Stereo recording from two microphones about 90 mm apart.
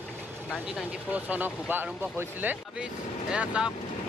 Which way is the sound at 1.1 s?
15° right (ahead or behind).